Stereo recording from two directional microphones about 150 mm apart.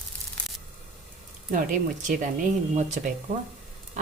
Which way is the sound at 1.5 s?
60° right (ahead or behind).